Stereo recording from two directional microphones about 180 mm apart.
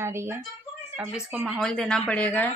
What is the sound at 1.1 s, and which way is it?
Speech, centre (ahead or behind).